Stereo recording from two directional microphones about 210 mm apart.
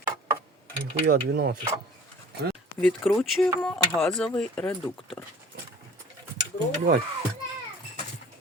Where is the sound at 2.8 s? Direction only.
Centre (ahead or behind).